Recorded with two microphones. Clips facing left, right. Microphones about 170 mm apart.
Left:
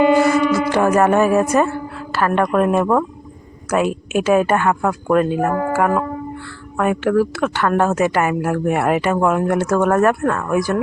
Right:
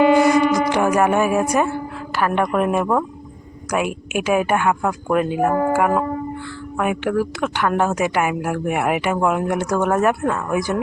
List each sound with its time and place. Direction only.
0.2 s music: 15° right (ahead or behind)
0.7 s a woman's voice: 15° right (ahead or behind)